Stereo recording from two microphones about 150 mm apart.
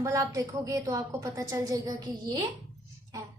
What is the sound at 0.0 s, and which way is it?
A woman's voice, 20° right (ahead or behind).